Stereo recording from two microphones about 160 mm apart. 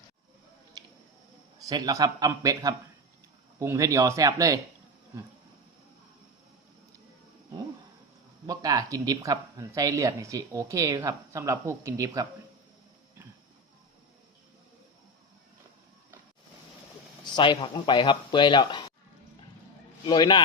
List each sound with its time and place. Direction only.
0.8 s scissors: 25° right (ahead or behind)
1.6 s speech: 25° right (ahead or behind)
8.4 s speech: 20° right (ahead or behind)
17.2 s speech: 30° left (ahead or behind)
20.1 s speech: 30° left (ahead or behind)